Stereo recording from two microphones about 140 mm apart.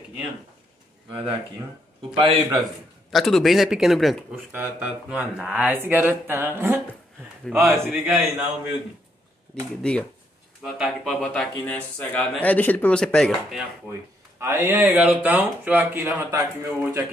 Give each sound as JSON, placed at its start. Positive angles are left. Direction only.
{"t": 2.1, "sound": "a man's voice", "side_deg": -40}
{"t": 3.1, "sound": "speech", "side_deg": 0}
{"t": 4.5, "sound": "speech", "side_deg": -15}
{"t": 9.8, "sound": "speech", "side_deg": 5}
{"t": 14.4, "sound": "a man's voice", "side_deg": -15}